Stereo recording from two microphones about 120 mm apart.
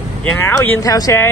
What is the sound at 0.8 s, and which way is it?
Speech, 30° left (ahead or behind).